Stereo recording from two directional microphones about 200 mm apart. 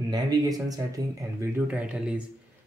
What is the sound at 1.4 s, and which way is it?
Speech, 5° right (ahead or behind).